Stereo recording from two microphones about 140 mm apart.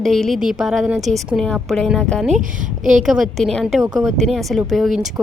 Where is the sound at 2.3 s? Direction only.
70° right (ahead or behind).